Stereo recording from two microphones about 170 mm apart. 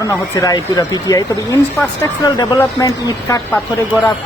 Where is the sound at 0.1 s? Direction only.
20° left (ahead or behind).